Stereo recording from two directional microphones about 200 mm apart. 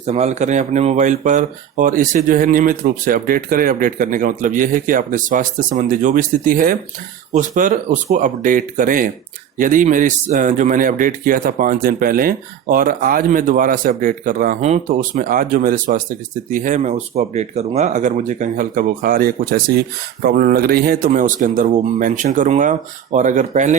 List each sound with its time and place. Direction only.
0.0 s speech: 35° right (ahead or behind)